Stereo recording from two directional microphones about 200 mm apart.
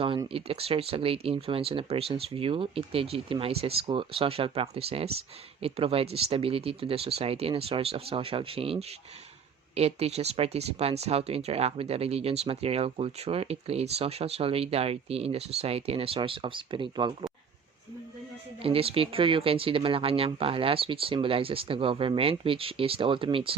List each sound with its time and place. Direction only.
0.0 s speech: 25° right (ahead or behind)
18.6 s speech: 30° right (ahead or behind)